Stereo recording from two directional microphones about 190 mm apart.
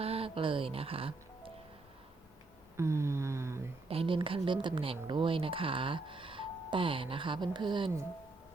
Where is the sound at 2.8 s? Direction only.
15° right (ahead or behind).